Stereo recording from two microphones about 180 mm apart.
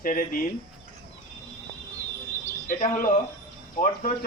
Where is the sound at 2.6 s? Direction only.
45° left (ahead or behind).